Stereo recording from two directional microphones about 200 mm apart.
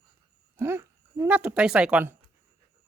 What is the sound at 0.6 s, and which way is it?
Speech, 15° right (ahead or behind).